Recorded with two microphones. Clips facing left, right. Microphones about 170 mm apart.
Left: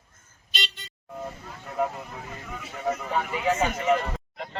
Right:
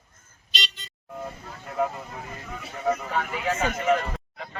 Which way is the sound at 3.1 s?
15° left (ahead or behind).